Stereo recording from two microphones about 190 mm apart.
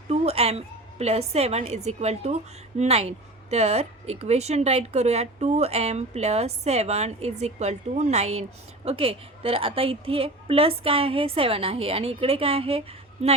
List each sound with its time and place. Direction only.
0.1 s a woman's voice: 35° right (ahead or behind)